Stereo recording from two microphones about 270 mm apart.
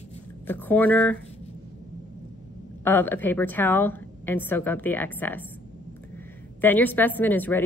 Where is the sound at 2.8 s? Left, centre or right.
Centre.